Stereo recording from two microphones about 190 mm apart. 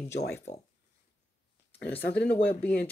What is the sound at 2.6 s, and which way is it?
Speech, 5° left (ahead or behind).